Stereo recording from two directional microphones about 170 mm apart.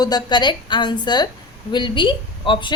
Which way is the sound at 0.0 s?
25° left (ahead or behind).